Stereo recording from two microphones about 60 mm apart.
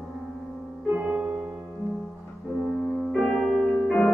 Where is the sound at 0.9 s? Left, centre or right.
Right.